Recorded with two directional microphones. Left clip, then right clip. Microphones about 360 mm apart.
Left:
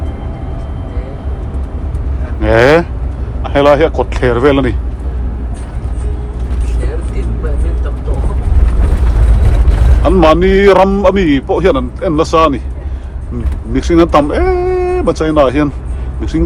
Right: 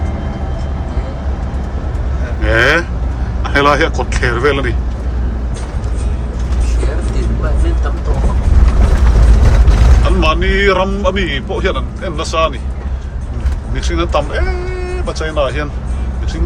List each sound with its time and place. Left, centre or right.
2.4 s vehicle: centre
3.4 s speech: centre
10.0 s speech: centre
13.7 s speech: centre